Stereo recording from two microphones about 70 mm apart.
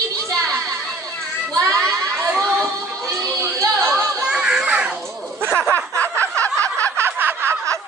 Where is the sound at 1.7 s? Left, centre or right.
Centre.